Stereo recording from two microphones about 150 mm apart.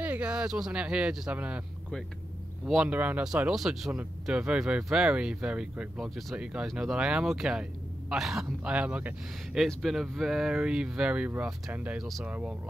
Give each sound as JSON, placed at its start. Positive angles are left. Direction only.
{"t": 0.0, "sound": "speech", "side_deg": -10}
{"t": 2.6, "sound": "speech", "side_deg": -5}